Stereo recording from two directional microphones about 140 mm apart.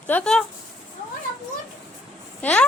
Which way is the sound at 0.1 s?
5° left (ahead or behind).